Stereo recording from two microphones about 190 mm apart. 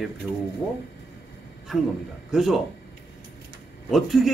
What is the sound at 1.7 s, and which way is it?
Speech, centre (ahead or behind).